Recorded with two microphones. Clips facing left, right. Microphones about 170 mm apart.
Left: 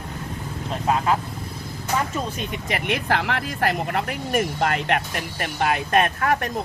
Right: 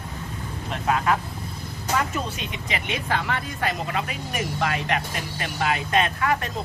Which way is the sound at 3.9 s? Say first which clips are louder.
Left 4 dB; 55° left (ahead or behind).